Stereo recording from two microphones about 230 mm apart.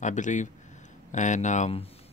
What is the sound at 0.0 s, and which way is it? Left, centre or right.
Speech, left.